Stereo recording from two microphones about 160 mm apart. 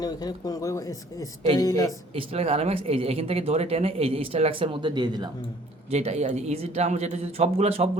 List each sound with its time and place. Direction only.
0.0 s speech: 25° left (ahead or behind)
2.1 s speech: 40° right (ahead or behind)
5.9 s speech: 40° right (ahead or behind)